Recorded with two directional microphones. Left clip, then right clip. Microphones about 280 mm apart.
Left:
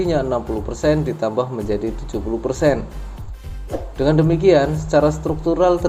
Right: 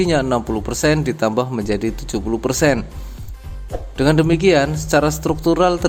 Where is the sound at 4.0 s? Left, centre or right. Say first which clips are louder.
Right 2 dB; right.